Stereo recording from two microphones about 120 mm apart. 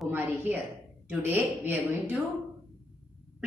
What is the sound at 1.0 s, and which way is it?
A woman's voice, 15° right (ahead or behind).